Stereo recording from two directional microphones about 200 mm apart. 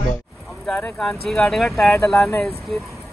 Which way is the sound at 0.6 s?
5° left (ahead or behind).